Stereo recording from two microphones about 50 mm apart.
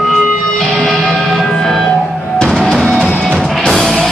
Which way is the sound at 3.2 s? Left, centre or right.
Centre.